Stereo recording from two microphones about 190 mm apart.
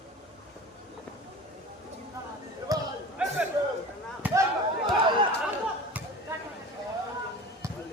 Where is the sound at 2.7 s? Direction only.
20° right (ahead or behind).